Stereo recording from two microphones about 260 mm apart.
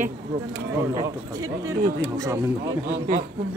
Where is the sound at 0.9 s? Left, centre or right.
Centre.